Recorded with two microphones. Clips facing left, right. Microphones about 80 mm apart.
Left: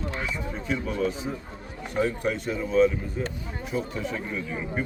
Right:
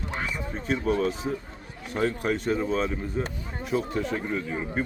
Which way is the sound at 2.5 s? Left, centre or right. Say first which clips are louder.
Left 5 dB; right.